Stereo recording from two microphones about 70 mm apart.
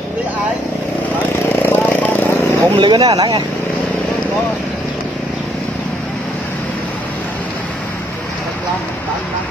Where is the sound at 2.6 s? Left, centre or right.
Right.